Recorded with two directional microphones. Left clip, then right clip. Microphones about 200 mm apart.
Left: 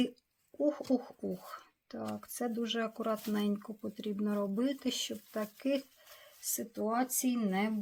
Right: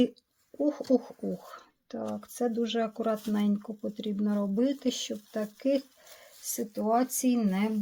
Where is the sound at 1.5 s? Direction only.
25° right (ahead or behind).